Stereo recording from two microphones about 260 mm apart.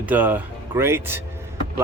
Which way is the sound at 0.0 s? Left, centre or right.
Centre.